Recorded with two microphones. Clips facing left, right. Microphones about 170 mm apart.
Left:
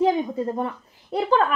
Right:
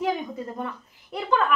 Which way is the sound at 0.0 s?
30° left (ahead or behind).